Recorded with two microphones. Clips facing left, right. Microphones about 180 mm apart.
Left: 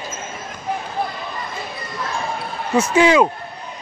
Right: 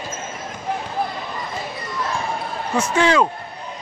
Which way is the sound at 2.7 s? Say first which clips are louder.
Left 4 dB; 10° left (ahead or behind).